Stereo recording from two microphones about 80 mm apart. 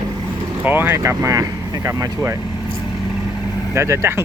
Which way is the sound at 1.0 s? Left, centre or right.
Right.